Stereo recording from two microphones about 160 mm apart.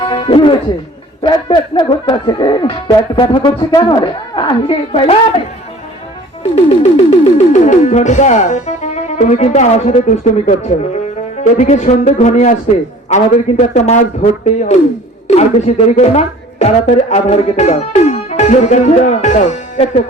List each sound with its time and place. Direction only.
0.0 s music: 30° left (ahead or behind)
1.2 s speech: 30° left (ahead or behind)
6.7 s speech: 40° left (ahead or behind)
15.3 s speech: 45° left (ahead or behind)